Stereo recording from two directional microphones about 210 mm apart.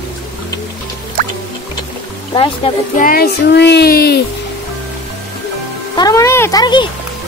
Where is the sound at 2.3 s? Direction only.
25° left (ahead or behind).